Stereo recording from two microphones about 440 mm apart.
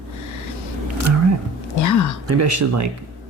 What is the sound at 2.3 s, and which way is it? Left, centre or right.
Speech, right.